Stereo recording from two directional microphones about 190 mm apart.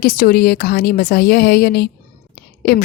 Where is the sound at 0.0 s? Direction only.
50° left (ahead or behind).